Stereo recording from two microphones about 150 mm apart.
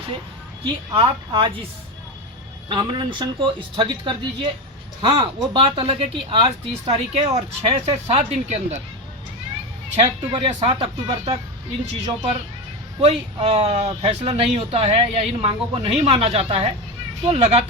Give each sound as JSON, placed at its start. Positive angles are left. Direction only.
{"t": 0.9, "sound": "speech", "side_deg": -30}
{"t": 2.6, "sound": "speech", "side_deg": -30}
{"t": 10.4, "sound": "speech", "side_deg": -40}